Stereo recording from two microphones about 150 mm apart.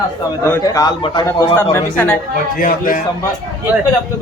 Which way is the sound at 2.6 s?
70° left (ahead or behind).